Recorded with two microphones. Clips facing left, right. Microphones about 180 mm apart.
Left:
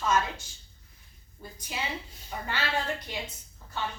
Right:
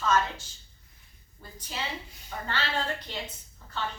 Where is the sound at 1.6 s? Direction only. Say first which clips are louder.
Left 1 dB; 10° left (ahead or behind).